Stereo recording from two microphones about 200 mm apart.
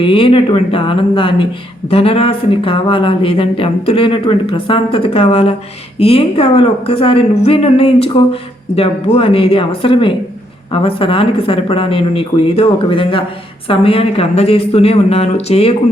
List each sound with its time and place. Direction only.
0.0 s a woman's voice: 25° left (ahead or behind)